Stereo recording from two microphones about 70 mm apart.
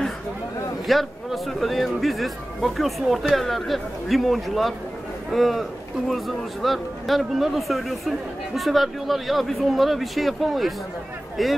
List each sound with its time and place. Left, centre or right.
0.8 s speech: centre